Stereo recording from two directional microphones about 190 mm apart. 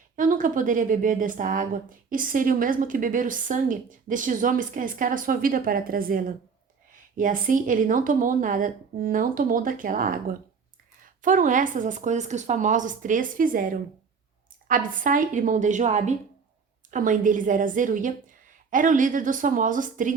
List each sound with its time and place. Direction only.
0.2 s a woman's voice: 45° right (ahead or behind)